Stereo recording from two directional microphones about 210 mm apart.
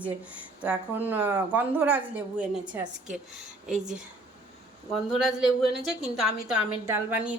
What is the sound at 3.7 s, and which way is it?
Speech, 35° right (ahead or behind).